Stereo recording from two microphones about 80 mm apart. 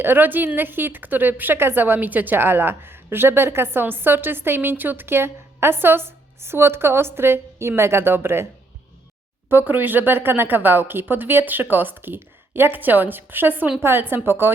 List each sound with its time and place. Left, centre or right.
0.0 s a woman's voice: right
9.5 s a woman's voice: right